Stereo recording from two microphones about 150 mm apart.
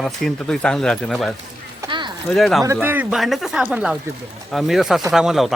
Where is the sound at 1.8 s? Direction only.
20° right (ahead or behind).